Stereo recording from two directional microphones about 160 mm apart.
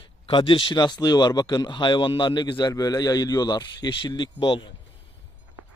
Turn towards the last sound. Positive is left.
turn(degrees=30)  # may be behind; listen again after turning